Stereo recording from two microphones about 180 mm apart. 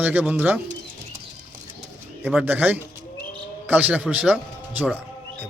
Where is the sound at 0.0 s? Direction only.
10° right (ahead or behind).